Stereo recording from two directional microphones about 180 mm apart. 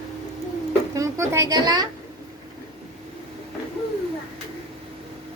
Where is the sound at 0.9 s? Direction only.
15° right (ahead or behind).